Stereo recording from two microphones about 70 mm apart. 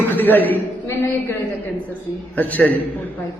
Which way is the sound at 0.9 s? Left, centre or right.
Left.